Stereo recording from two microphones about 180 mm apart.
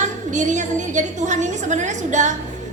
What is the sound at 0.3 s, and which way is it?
A woman's voice, 45° right (ahead or behind).